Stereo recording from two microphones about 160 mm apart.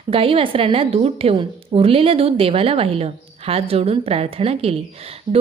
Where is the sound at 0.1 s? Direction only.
35° right (ahead or behind).